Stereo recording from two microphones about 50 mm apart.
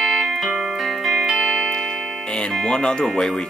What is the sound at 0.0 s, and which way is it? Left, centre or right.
Music, centre.